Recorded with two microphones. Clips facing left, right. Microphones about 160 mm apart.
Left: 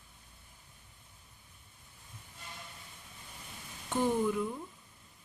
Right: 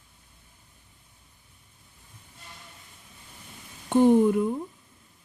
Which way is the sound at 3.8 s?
55° right (ahead or behind).